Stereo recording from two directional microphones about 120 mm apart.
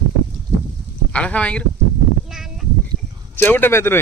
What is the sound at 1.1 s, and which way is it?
Speech, 10° left (ahead or behind).